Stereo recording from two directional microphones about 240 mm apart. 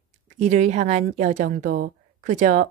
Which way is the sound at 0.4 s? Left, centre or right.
Right.